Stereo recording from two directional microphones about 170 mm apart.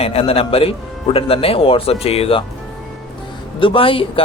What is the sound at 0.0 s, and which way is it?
A man's voice, 35° left (ahead or behind).